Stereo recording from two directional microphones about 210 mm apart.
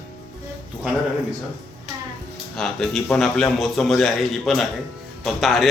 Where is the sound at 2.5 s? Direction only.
Centre (ahead or behind).